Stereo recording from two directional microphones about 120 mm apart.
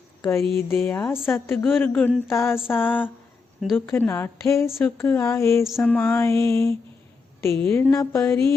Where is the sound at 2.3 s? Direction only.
20° left (ahead or behind).